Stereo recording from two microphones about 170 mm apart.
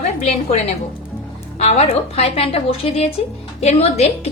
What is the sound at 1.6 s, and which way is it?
A woman's voice, 40° left (ahead or behind).